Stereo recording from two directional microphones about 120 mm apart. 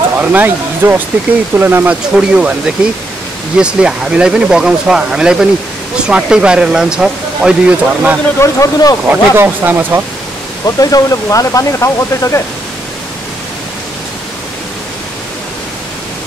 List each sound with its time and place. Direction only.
0.2 s speech: 15° right (ahead or behind)
8.4 s speech: 30° left (ahead or behind)
9.1 s speech: 15° right (ahead or behind)
10.8 s speech: 30° left (ahead or behind)